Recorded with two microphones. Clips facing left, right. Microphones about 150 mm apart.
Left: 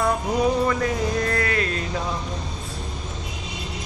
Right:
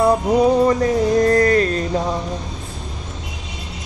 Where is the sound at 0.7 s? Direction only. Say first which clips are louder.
Right 7 dB; 35° right (ahead or behind).